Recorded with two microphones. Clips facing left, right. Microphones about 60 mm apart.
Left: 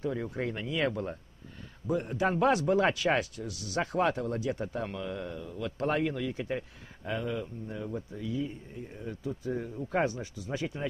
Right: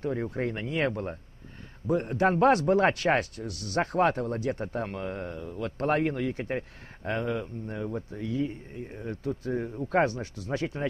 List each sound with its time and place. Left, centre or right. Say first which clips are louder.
0.0 s speech: right 3 dB; right